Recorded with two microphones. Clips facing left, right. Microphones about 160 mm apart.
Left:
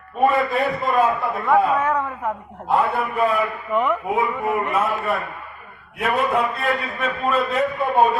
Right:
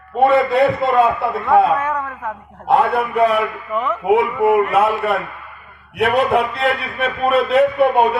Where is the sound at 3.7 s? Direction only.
Centre (ahead or behind).